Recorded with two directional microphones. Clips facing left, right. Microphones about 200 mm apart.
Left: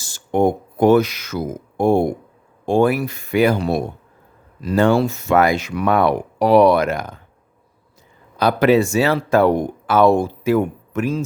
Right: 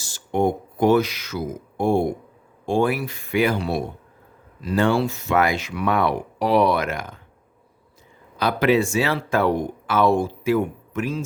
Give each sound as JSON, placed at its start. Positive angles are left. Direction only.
{"t": 0.0, "sound": "speech", "side_deg": 45}
{"t": 8.4, "sound": "speech", "side_deg": 40}